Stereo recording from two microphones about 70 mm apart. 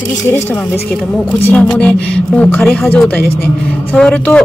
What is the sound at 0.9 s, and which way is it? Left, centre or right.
Speech, centre.